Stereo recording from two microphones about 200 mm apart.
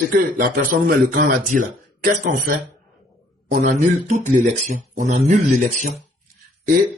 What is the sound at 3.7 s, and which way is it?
A man's voice, 35° right (ahead or behind).